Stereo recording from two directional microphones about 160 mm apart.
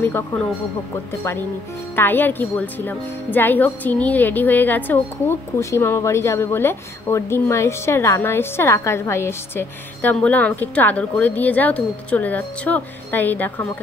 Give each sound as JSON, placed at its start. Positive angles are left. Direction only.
{"t": 0.0, "sound": "a woman's voice", "side_deg": 15}
{"t": 2.0, "sound": "a woman's voice", "side_deg": 10}